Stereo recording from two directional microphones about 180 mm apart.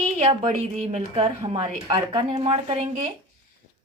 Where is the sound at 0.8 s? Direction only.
35° right (ahead or behind).